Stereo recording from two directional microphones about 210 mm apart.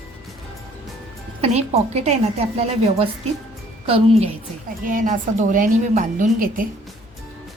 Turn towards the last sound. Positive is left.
turn(degrees=-40)  # may be behind; listen again after turning